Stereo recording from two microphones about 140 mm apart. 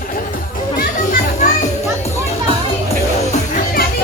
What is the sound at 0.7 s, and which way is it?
Children playing, 90° left.